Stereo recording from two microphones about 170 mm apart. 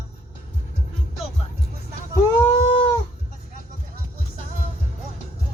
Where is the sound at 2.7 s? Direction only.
35° left (ahead or behind).